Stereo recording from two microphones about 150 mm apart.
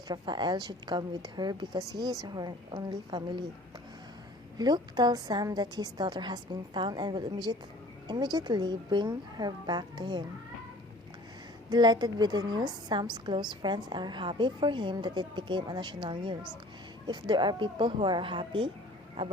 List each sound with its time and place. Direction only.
0.1 s a woman's voice: 30° right (ahead or behind)
4.5 s a woman's voice: 25° right (ahead or behind)
11.7 s a woman's voice: 30° right (ahead or behind)